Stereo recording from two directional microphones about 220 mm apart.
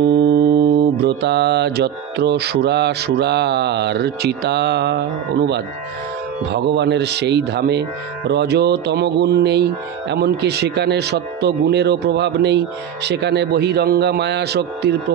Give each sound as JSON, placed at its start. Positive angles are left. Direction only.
{"t": 0.0, "sound": "music", "side_deg": -50}